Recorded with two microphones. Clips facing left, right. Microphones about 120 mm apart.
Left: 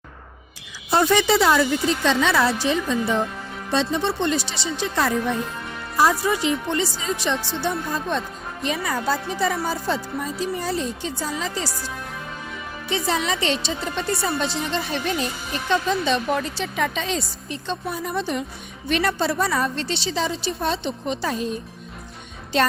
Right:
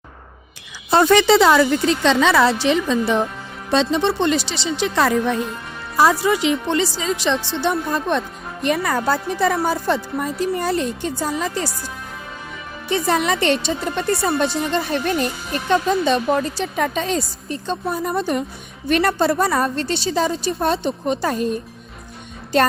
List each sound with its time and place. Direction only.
0.9 s a woman's voice: 70° right (ahead or behind); by 4.4 s 90° right
4.8 s a woman's voice: 80° right; by 11.7 s 55° right (ahead or behind)
12.9 s speech: 55° right (ahead or behind)